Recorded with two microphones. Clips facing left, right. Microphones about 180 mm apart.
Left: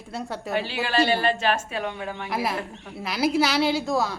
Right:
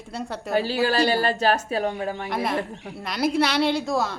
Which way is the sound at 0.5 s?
40° right (ahead or behind).